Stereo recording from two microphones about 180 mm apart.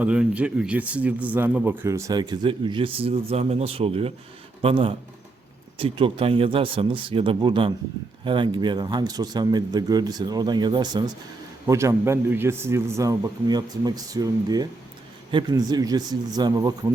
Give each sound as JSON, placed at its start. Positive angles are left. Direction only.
{"t": 0.0, "sound": "a man's voice", "side_deg": -5}